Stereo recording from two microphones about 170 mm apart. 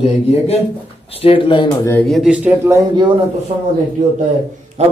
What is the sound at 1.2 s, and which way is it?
Speech, 30° left (ahead or behind).